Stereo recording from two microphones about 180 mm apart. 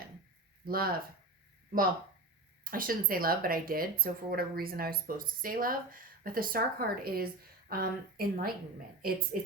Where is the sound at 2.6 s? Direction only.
50° right (ahead or behind).